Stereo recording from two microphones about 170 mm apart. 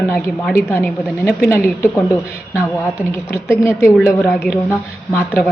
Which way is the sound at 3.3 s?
15° left (ahead or behind).